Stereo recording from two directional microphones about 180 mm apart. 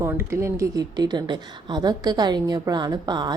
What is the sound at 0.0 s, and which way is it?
A woman's voice, 15° right (ahead or behind).